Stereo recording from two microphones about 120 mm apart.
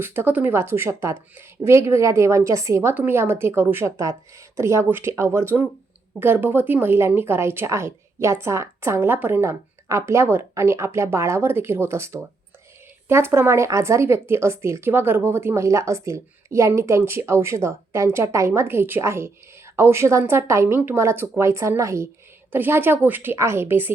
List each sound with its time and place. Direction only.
0.0 s a woman's voice: 20° right (ahead or behind)